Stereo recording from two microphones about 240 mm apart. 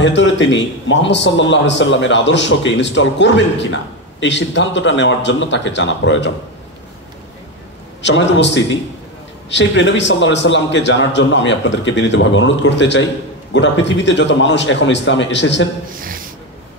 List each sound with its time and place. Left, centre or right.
0.0 s a man's voice: left
8.0 s a man's voice: left